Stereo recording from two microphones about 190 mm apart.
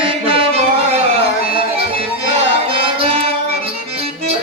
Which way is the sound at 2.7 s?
30° right (ahead or behind).